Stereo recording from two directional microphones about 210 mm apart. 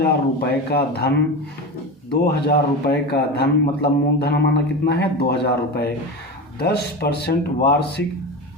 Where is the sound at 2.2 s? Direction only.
50° left (ahead or behind).